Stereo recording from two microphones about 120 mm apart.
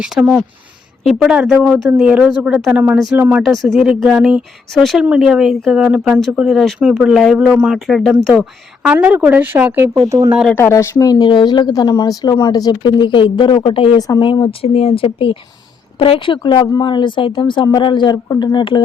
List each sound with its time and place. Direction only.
0.0 s speech: 5° right (ahead or behind)
3.5 s speech: centre (ahead or behind)
9.0 s speech: 15° right (ahead or behind)
10.1 s speech: 25° right (ahead or behind)
10.5 s speech: 20° left (ahead or behind)
10.9 s speech: 30° left (ahead or behind)